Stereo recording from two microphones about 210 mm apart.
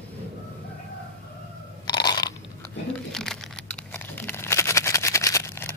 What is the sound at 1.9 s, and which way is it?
Crunch, 20° left (ahead or behind).